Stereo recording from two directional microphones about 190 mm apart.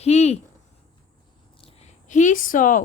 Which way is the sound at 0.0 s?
35° left (ahead or behind).